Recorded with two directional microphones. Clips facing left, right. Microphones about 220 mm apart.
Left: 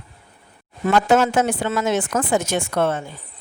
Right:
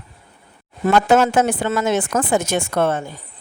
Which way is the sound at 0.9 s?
55° right (ahead or behind).